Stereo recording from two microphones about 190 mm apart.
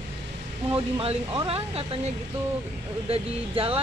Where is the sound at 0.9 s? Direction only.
25° right (ahead or behind).